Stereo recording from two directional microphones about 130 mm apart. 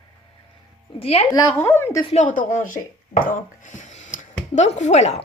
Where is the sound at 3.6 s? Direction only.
70° left (ahead or behind).